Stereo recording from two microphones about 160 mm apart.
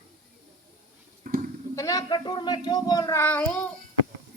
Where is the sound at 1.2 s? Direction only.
65° right (ahead or behind).